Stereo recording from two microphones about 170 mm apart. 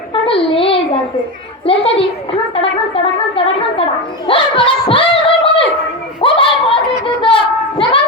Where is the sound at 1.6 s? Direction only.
35° left (ahead or behind).